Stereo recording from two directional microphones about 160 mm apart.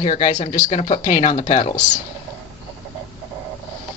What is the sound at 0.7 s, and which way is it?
Speech, 35° left (ahead or behind).